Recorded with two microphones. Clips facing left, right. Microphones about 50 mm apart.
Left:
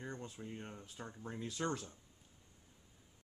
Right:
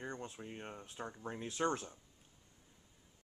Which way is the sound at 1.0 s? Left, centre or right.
Centre.